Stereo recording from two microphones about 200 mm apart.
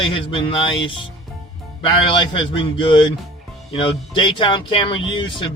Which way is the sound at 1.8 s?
25° left (ahead or behind).